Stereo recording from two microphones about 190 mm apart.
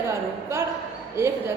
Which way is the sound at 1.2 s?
15° right (ahead or behind).